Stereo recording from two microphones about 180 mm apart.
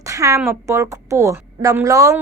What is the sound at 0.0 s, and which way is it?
A woman's voice, 15° right (ahead or behind).